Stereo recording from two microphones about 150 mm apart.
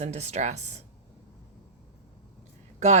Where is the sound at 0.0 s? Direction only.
45° right (ahead or behind).